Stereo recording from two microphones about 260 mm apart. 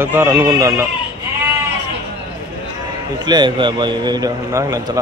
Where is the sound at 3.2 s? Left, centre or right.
Centre.